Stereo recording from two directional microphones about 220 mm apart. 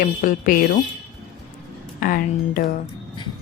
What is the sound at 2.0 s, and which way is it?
Speech, 40° left (ahead or behind).